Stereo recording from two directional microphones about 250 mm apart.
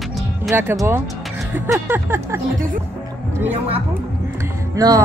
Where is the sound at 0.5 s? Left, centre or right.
Centre.